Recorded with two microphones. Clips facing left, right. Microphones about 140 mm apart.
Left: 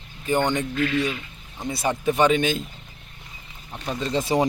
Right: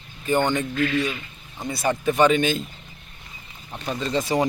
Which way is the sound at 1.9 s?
15° left (ahead or behind).